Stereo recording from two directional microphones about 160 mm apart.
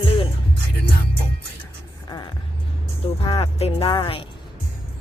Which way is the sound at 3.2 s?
35° left (ahead or behind).